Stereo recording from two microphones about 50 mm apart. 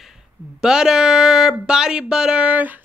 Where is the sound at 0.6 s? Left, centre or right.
Centre.